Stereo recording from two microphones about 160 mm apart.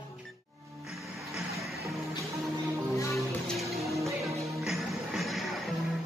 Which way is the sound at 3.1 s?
Centre (ahead or behind).